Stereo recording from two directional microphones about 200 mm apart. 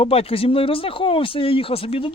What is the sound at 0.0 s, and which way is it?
Speech, 30° left (ahead or behind).